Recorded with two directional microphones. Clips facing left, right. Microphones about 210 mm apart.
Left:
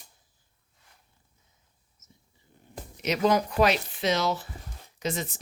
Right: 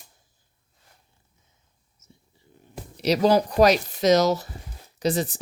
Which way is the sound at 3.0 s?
35° right (ahead or behind).